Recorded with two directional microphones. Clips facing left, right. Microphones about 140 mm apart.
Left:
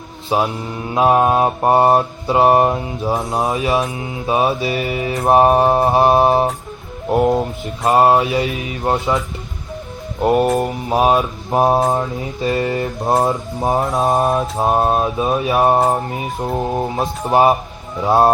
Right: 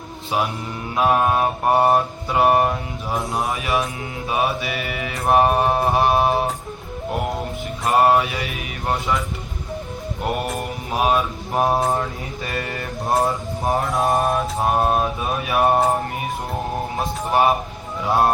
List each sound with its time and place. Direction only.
0.3 s mantra: 25° left (ahead or behind)
10.2 s mantra: 30° left (ahead or behind)
17.3 s mantra: 25° left (ahead or behind)